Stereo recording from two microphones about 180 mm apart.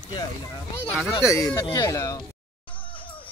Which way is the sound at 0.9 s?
10° left (ahead or behind).